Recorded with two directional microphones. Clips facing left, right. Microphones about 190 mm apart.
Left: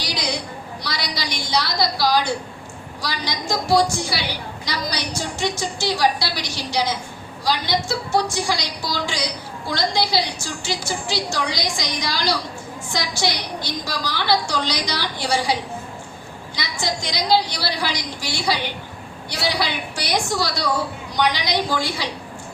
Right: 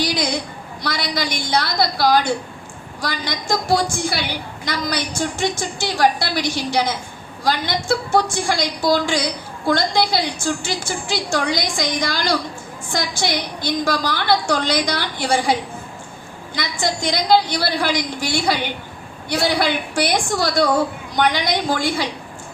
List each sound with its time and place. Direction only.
0.0 s a sound: 50° right (ahead or behind)
0.8 s a woman's voice: 50° right (ahead or behind)
16.6 s a woman's voice: 50° right (ahead or behind)